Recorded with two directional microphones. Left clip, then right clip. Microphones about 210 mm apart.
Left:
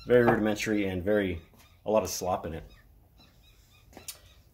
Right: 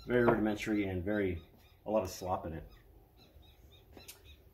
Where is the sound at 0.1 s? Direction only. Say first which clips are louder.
Left 7 dB; 50° left (ahead or behind).